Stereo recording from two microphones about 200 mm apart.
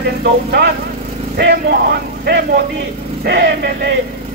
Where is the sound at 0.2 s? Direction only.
55° right (ahead or behind).